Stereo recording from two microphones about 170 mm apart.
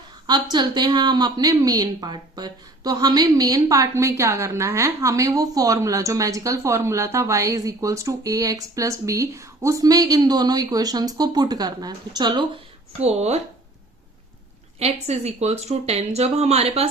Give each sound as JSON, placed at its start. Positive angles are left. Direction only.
{"t": 0.3, "sound": "speech", "side_deg": -25}
{"t": 13.0, "sound": "speech", "side_deg": -40}
{"t": 14.8, "sound": "speech", "side_deg": -40}